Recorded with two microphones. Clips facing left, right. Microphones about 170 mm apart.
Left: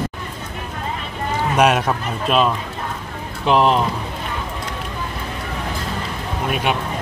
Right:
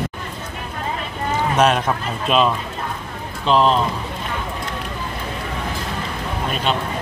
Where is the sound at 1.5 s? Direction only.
10° left (ahead or behind).